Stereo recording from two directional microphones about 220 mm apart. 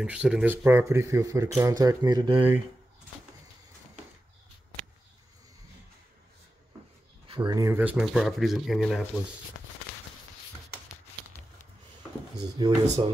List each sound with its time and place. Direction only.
0.0 s speech: 5° right (ahead or behind); by 2.4 s 20° right (ahead or behind)
7.2 s speech: 20° right (ahead or behind); by 9.0 s centre (ahead or behind)
12.4 s speech: 20° right (ahead or behind)